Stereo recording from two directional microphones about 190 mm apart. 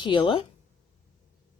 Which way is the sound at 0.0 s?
25° left (ahead or behind).